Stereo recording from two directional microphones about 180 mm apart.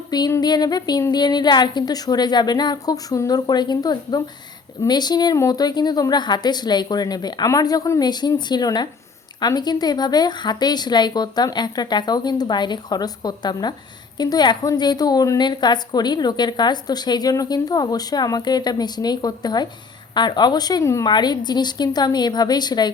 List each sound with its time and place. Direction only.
0.1 s a woman's voice: 20° left (ahead or behind)